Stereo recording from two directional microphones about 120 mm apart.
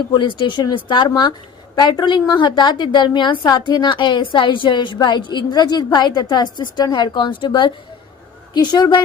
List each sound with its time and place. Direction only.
0.1 s a woman's voice: 40° left (ahead or behind)